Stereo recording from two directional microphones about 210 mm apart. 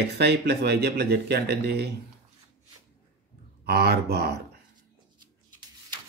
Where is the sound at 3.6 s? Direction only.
50° right (ahead or behind).